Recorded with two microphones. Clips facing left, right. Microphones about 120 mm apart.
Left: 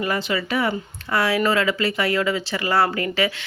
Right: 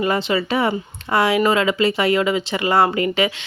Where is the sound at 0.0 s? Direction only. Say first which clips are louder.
Right 4 dB; 25° right (ahead or behind).